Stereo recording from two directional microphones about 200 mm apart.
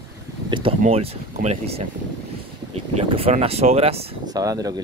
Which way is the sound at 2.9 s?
30° right (ahead or behind).